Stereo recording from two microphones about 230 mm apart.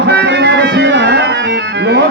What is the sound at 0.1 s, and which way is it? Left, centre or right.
Music, right.